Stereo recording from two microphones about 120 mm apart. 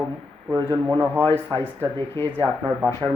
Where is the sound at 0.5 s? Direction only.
35° right (ahead or behind).